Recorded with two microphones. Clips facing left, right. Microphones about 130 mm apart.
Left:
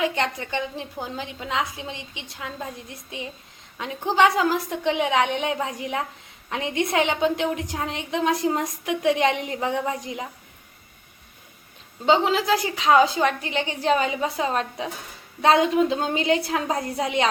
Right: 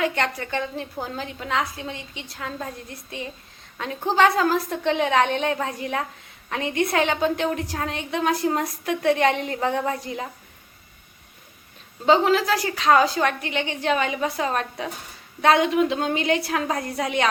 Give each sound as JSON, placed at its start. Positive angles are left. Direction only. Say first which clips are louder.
{"t": 0.0, "sound": "a woman's voice", "louder": "even", "side_deg": 20}
{"t": 3.8, "sound": "a woman's voice", "louder": "even", "side_deg": 15}
{"t": 12.0, "sound": "a woman's voice", "louder": "right 1 dB", "side_deg": 20}